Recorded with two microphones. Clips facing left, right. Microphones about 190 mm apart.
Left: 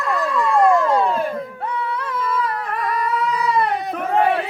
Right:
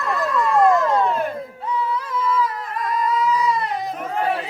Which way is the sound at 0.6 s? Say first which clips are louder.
Left 2 dB; 30° left (ahead or behind).